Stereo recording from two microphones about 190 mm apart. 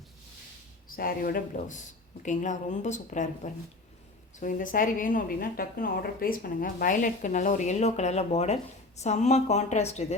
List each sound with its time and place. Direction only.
0.9 s a woman's voice: 50° left (ahead or behind); by 10.2 s 35° left (ahead or behind)